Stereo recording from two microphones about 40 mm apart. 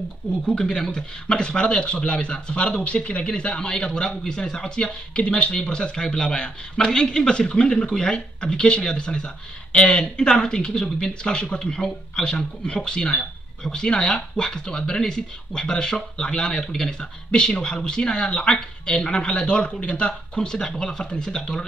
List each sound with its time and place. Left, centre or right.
0.5 s speech: left